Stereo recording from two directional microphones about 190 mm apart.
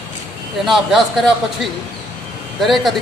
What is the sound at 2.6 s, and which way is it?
Speech, centre (ahead or behind).